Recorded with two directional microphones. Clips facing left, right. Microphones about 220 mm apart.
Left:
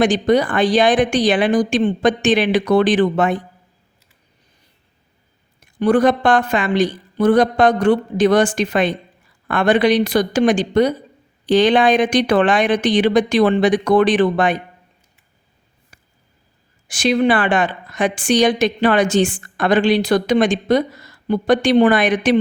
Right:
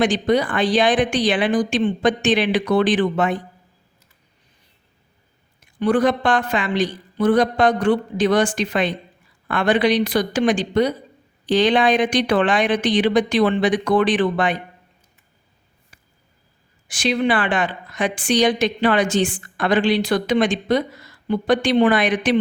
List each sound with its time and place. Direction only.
0.0 s a woman's voice: 45° left (ahead or behind)
5.8 s a woman's voice: 45° left (ahead or behind)
15.9 s a sound: 45° left (ahead or behind)
16.9 s a woman's voice: 45° left (ahead or behind)